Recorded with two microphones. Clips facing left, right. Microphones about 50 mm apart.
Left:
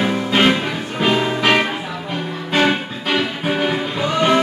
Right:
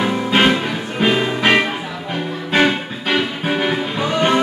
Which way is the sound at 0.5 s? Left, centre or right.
Centre.